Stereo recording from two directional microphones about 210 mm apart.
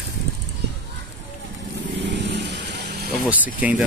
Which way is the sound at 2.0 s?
55° right (ahead or behind).